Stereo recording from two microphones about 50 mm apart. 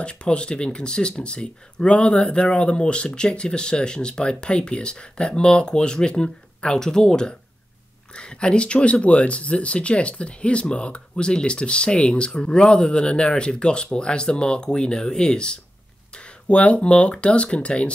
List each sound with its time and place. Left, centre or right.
0.0 s speech: centre